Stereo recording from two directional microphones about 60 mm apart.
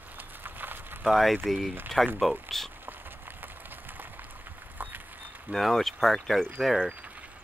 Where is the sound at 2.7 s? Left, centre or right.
Right.